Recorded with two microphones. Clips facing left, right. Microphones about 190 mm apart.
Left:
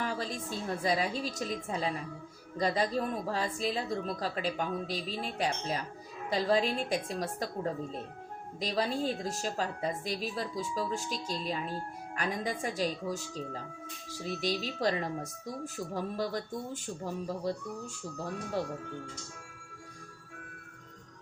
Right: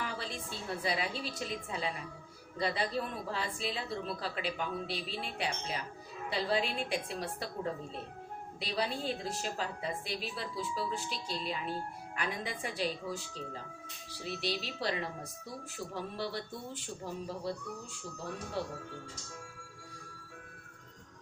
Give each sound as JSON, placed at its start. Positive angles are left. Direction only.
{"t": 0.0, "sound": "a woman's voice", "side_deg": 40}